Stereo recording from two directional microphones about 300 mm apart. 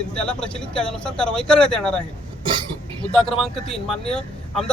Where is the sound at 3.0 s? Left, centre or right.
Centre.